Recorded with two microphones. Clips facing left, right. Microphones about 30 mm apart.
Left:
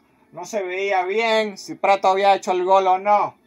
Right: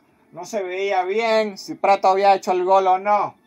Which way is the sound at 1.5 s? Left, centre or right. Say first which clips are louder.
Right 1 dB; centre.